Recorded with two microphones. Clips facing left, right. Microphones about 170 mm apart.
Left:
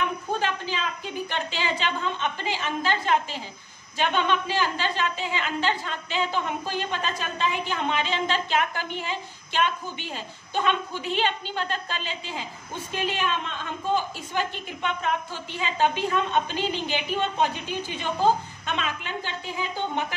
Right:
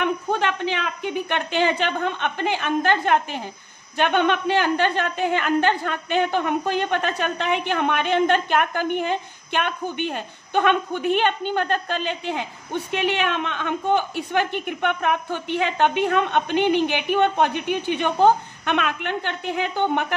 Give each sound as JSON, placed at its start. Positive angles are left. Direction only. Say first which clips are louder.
{"t": 0.0, "sound": "a woman's voice", "louder": "right 5 dB", "side_deg": -65}